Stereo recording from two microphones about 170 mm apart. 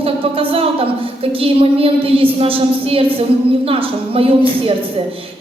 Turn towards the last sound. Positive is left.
turn(degrees=-35)  # may be behind; listen again after turning